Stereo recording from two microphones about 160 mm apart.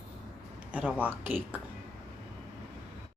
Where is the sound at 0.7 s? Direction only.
10° right (ahead or behind).